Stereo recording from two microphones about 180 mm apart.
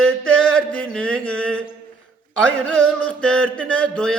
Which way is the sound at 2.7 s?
5° left (ahead or behind).